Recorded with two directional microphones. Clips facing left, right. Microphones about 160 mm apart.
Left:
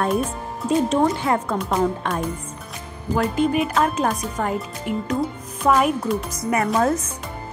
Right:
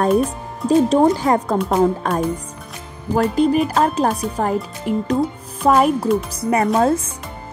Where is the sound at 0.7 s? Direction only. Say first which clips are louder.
Right 5 dB; 35° right (ahead or behind).